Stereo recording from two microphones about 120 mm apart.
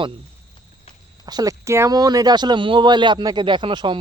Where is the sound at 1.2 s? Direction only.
35° right (ahead or behind).